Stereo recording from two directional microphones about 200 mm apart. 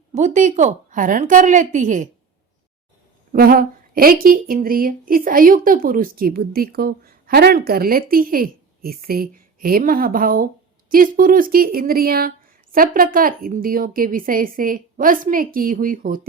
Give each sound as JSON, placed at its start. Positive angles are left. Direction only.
{"t": 0.1, "sound": "a woman's voice", "side_deg": -35}
{"t": 3.3, "sound": "a woman's voice", "side_deg": -45}